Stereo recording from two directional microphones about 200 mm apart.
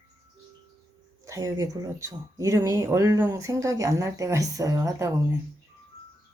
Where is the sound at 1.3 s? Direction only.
15° right (ahead or behind).